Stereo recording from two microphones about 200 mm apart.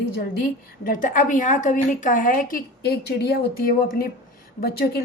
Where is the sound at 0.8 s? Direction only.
40° left (ahead or behind).